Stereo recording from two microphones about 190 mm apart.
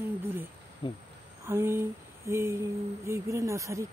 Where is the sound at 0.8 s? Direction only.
25° left (ahead or behind).